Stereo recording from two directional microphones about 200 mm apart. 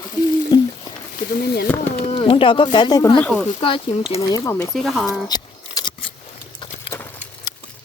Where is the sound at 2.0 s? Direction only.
30° left (ahead or behind).